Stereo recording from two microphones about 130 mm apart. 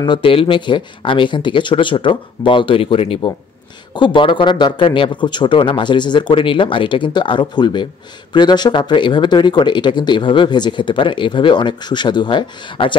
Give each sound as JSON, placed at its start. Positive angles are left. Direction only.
{"t": 0.0, "sound": "speech", "side_deg": 40}